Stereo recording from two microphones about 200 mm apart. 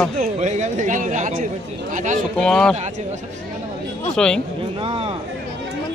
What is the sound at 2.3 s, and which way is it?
Speech, 5° left (ahead or behind).